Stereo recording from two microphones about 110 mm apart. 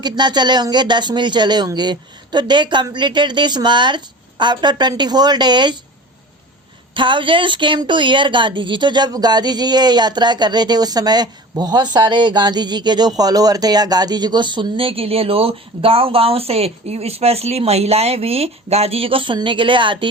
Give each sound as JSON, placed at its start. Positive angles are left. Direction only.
{"t": 0.0, "sound": "a woman's voice", "side_deg": -40}
{"t": 6.9, "sound": "a woman's voice", "side_deg": -50}